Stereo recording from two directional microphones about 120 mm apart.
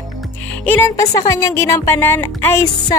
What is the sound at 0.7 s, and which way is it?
Speech, 20° left (ahead or behind).